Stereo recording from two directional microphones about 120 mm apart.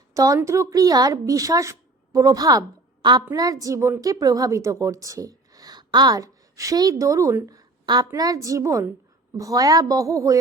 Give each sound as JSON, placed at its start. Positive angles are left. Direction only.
{"t": 0.1, "sound": "a woman's voice", "side_deg": -30}